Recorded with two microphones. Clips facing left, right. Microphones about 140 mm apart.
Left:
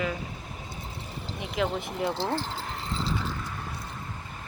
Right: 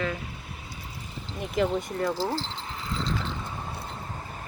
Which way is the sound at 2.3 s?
50° left (ahead or behind).